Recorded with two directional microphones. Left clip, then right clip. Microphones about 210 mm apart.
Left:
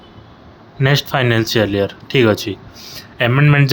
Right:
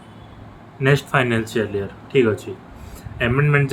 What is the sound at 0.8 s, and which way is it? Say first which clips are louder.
Speech: left 2 dB; 40° left (ahead or behind).